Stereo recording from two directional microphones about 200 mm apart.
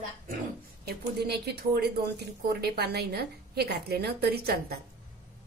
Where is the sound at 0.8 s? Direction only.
55° right (ahead or behind).